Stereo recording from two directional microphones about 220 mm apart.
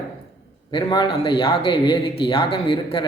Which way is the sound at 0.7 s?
20° left (ahead or behind).